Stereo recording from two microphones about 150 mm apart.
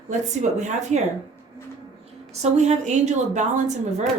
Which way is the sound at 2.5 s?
50° right (ahead or behind).